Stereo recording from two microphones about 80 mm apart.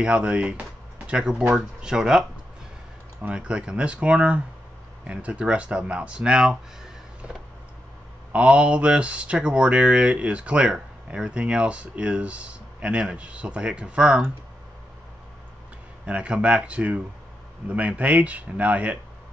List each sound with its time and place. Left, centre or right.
0.0 s speech: centre
8.3 s speech: centre
16.1 s speech: centre